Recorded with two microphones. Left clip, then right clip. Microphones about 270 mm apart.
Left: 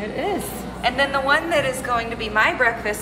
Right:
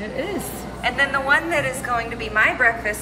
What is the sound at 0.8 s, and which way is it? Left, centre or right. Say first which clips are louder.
A woman's voice: even; centre.